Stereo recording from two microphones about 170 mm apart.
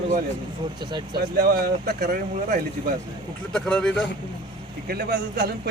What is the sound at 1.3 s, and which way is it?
Speech, 60° right (ahead or behind).